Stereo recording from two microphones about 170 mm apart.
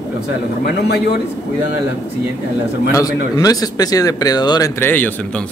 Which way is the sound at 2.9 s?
20° left (ahead or behind).